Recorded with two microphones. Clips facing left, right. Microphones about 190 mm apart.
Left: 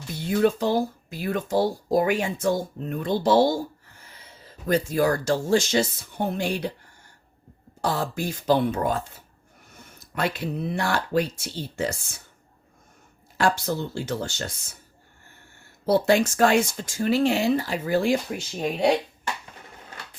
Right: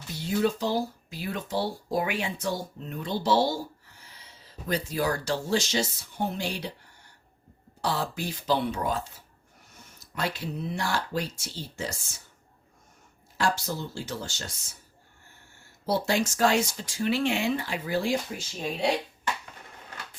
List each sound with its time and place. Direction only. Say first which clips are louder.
0.2 s speech: left 4 dB; 55° left (ahead or behind)
7.8 s speech: left 3 dB; 50° left (ahead or behind)
13.3 s speech: left 5 dB; 60° left (ahead or behind)
15.9 s speech: left 7 dB; 55° left (ahead or behind)
18.1 s speech: left 5 dB; 60° left (ahead or behind)